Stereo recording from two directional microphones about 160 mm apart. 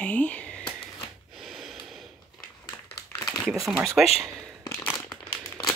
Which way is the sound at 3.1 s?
20° left (ahead or behind).